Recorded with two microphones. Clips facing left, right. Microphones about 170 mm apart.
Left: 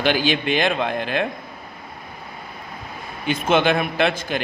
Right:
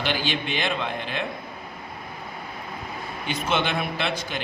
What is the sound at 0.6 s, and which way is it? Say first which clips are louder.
Speech: left 6 dB; 50° left (ahead or behind).